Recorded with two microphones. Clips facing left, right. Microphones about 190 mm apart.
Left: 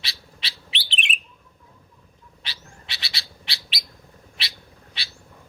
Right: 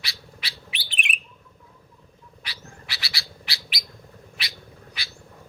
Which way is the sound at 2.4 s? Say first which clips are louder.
Right 1 dB; 25° left (ahead or behind).